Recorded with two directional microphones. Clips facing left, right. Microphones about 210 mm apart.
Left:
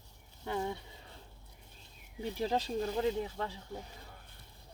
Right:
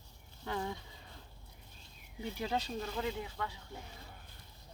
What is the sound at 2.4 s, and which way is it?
Speech, 35° left (ahead or behind).